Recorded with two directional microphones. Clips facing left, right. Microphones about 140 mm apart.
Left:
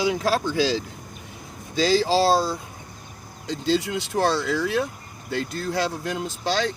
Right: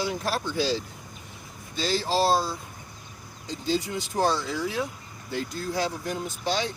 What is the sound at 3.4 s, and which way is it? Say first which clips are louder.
Speech: left 5 dB; 75° left (ahead or behind).